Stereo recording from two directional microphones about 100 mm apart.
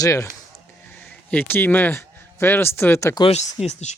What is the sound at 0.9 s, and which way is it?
Speech, 15° left (ahead or behind).